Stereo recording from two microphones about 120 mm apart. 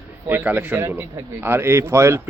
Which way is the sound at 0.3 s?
15° right (ahead or behind).